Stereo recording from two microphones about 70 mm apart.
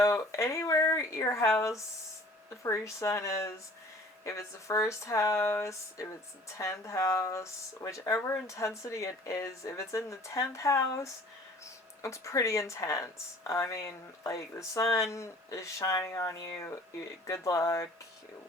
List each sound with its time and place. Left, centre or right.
0.0 s speech: left